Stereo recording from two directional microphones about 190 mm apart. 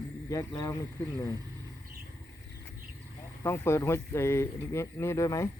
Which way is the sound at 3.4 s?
15° left (ahead or behind).